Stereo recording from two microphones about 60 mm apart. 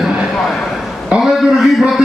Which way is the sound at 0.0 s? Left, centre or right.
Centre.